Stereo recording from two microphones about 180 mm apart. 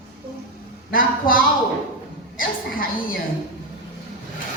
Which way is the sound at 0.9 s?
50° left (ahead or behind).